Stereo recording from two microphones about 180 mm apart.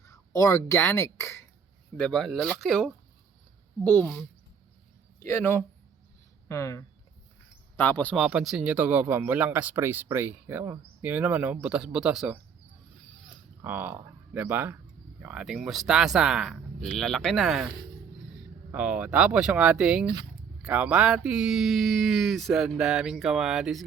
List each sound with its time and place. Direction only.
0.0 s speech: 20° left (ahead or behind)
2.0 s speech: 5° left (ahead or behind)
5.2 s speech: 10° left (ahead or behind)
8.2 s a man's voice: 5° right (ahead or behind)
13.6 s speech: 10° right (ahead or behind)
18.7 s a man's voice: 10° right (ahead or behind)